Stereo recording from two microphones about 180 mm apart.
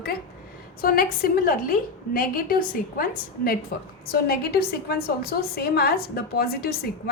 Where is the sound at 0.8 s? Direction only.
55° left (ahead or behind).